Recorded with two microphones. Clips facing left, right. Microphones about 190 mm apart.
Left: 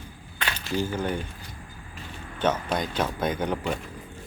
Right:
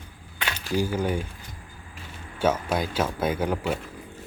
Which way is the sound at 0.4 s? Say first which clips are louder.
Right 2 dB; 10° right (ahead or behind).